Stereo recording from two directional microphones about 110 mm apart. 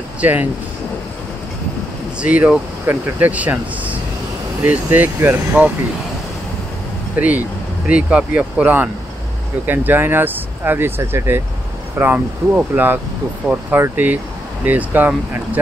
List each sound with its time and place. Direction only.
0.2 s speech: 15° right (ahead or behind)
2.1 s speech: 10° right (ahead or behind)
7.2 s speech: 15° right (ahead or behind)